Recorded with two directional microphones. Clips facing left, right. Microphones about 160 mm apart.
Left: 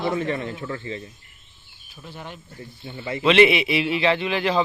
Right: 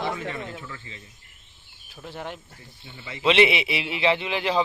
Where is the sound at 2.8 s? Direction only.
45° left (ahead or behind).